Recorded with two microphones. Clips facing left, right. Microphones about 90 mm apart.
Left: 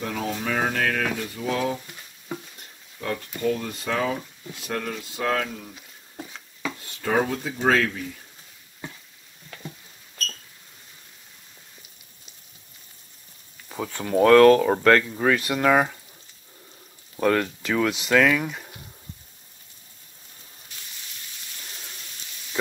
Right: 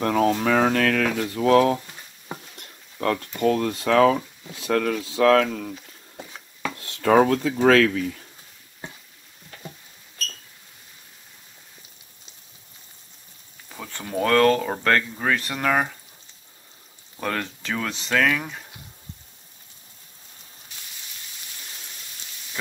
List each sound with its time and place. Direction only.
0.0 s speech: 60° right (ahead or behind); by 1.8 s 80° right
3.0 s speech: 65° right (ahead or behind); by 8.0 s 90° right
13.7 s speech: 5° left (ahead or behind)
17.2 s speech: 5° left (ahead or behind)
18.1 s speech: centre (ahead or behind)